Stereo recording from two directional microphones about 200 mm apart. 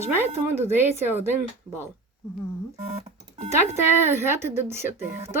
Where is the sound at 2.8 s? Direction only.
30° right (ahead or behind).